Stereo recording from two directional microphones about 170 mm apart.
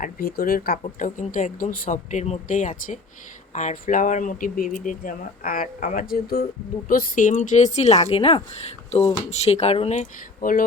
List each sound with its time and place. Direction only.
0.0 s speech: 65° left (ahead or behind)